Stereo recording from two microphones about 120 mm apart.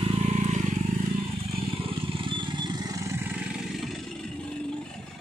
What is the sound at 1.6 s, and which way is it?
Vehicle, 50° right (ahead or behind).